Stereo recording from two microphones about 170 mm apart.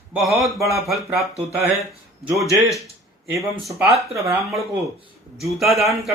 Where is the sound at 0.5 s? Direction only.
15° right (ahead or behind).